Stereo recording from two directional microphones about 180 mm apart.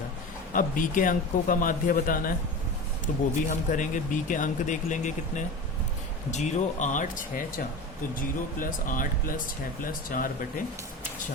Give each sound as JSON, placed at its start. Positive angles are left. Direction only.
{"t": 0.5, "sound": "speech", "side_deg": 50}